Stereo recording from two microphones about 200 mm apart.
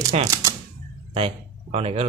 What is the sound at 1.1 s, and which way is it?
Speech, 30° right (ahead or behind).